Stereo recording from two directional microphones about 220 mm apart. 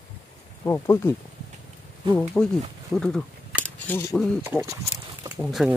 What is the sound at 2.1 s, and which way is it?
Speech, 5° left (ahead or behind).